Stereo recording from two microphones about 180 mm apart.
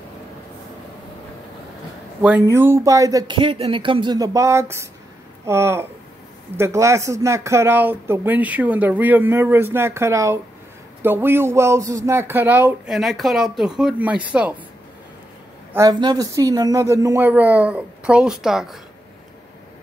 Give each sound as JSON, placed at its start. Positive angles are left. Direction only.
{"t": 2.4, "sound": "speech", "side_deg": -15}
{"t": 15.7, "sound": "speech", "side_deg": -20}